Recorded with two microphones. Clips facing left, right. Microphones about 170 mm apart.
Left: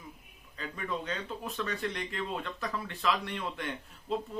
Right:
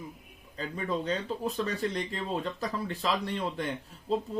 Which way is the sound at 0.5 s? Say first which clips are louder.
Right 4 dB; 35° right (ahead or behind).